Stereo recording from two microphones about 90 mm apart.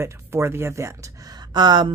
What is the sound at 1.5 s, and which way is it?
Speech, 55° right (ahead or behind).